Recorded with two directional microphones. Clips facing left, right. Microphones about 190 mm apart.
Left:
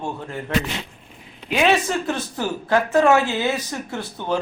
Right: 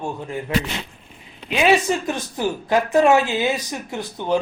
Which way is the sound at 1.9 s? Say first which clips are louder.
Right 1 dB; 15° right (ahead or behind).